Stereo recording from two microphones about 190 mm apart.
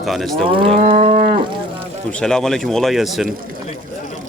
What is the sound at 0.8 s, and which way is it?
Moo, 30° right (ahead or behind).